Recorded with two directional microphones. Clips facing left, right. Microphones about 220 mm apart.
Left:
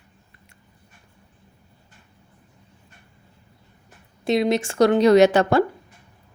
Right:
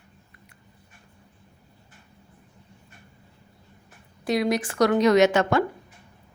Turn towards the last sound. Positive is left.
turn(degrees=35)  # may be behind; listen again after turning